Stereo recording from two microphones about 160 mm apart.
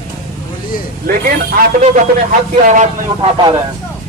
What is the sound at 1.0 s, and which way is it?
Speech, 65° right (ahead or behind).